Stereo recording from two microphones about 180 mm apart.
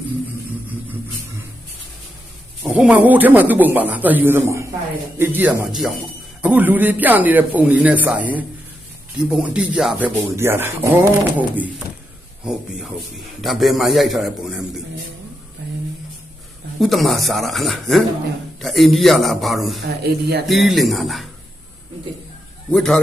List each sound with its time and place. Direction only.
2.6 s a man's voice: 5° right (ahead or behind)
16.8 s a man's voice: centre (ahead or behind)
20.0 s speech: 60° right (ahead or behind)
20.5 s a man's voice: centre (ahead or behind)
22.7 s a man's voice: 5° left (ahead or behind)